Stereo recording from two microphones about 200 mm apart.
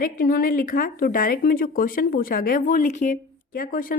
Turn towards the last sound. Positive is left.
turn(degrees=45)  # may be behind; listen again after turning